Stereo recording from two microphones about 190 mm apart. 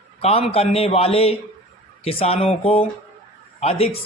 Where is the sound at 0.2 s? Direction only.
30° left (ahead or behind).